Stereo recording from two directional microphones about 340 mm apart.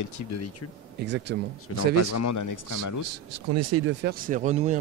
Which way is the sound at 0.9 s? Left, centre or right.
Right.